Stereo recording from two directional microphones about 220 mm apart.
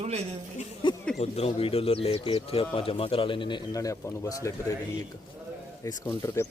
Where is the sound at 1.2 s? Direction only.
25° left (ahead or behind).